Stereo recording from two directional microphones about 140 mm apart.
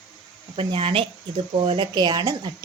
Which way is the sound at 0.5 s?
40° right (ahead or behind).